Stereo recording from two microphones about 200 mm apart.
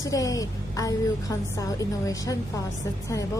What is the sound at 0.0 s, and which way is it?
A woman's voice, 15° left (ahead or behind).